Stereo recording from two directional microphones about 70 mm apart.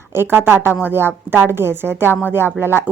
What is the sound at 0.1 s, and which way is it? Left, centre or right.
A woman's voice, right.